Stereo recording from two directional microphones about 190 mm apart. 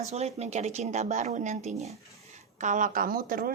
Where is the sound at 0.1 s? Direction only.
35° right (ahead or behind).